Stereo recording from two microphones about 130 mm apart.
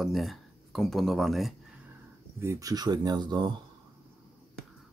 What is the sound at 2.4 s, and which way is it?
Speech, 25° right (ahead or behind).